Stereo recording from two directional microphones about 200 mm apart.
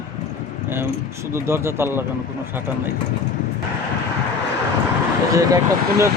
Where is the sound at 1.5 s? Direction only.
10° right (ahead or behind).